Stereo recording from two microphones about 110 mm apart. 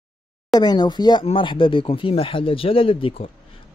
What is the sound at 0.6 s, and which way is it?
Speech, 40° left (ahead or behind).